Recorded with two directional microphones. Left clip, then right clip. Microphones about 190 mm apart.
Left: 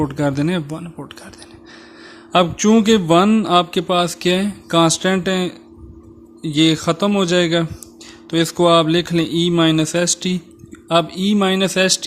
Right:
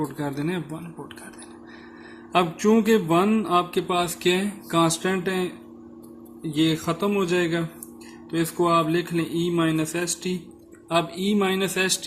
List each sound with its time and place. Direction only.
0.0 s a man's voice: 50° left (ahead or behind)
2.3 s a man's voice: 50° left (ahead or behind)
6.5 s a man's voice: 55° left (ahead or behind)